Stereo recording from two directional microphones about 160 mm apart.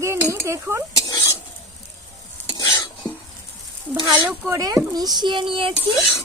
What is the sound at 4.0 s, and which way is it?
Speech, 25° right (ahead or behind).